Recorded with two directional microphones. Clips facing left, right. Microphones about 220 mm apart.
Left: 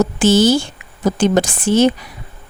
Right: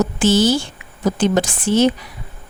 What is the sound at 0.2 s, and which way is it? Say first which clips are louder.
Speech: left 3 dB; 45° left (ahead or behind).